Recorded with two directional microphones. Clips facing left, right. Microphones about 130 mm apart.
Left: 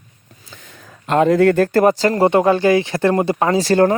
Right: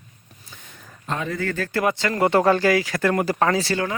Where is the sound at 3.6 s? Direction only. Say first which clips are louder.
Left 11 dB; 45° left (ahead or behind).